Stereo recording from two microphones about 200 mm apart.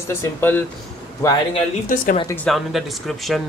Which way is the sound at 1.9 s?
40° left (ahead or behind).